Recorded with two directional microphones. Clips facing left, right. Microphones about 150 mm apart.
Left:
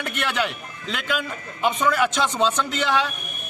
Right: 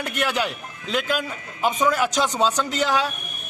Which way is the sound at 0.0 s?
40° right (ahead or behind).